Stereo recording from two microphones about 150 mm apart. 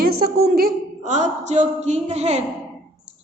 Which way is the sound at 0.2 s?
85° right.